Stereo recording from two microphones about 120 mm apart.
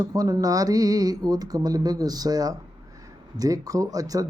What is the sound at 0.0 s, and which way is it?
Speech, 30° right (ahead or behind).